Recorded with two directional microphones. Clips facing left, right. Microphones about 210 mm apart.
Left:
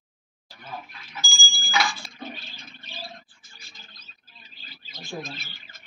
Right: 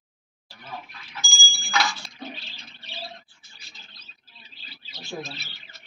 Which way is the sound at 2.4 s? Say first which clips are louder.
Left 2 dB; 50° left (ahead or behind).